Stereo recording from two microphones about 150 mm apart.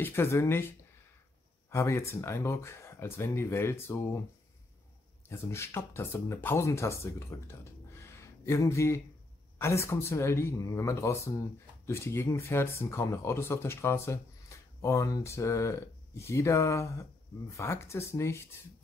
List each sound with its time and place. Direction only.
0.0 s speech: 15° left (ahead or behind)
5.4 s speech: 15° left (ahead or behind)